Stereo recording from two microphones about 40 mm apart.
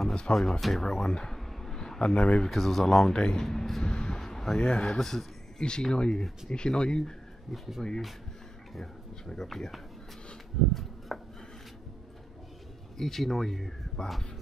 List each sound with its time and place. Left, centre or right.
0.3 s speech: centre
1.6 s a sound: centre
2.4 s speech: centre
3.2 s speech: left
3.4 s speech: centre
4.2 s a sound: centre
4.6 s speech: left
7.5 s speech: centre
10.7 s a sound: centre
12.9 s speech: centre